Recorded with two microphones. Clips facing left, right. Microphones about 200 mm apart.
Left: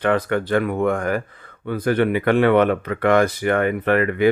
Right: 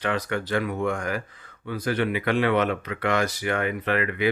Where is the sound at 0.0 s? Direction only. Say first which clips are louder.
Left 7 dB; 55° left (ahead or behind).